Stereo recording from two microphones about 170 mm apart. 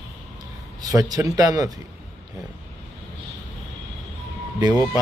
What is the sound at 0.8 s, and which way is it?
Speech, 20° right (ahead or behind).